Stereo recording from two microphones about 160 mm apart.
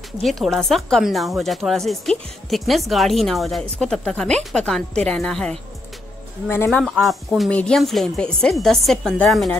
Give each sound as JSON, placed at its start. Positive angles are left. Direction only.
{"t": 0.2, "sound": "speech", "side_deg": 0}
{"t": 6.5, "sound": "speech", "side_deg": 15}
{"t": 6.8, "sound": "speech", "side_deg": 0}